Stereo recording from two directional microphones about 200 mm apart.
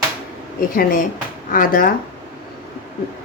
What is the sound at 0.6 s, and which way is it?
A woman's voice, 45° left (ahead or behind).